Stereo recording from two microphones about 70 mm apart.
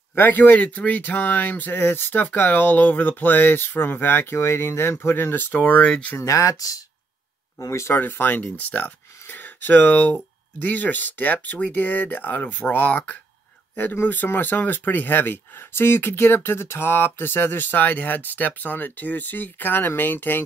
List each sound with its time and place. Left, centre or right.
0.1 s speech: left
6.1 s speech: left
7.6 s speech: left